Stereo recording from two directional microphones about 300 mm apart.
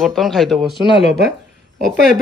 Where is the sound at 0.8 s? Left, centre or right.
Centre.